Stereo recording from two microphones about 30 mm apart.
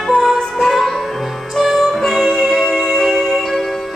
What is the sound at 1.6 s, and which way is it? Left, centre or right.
Music, centre.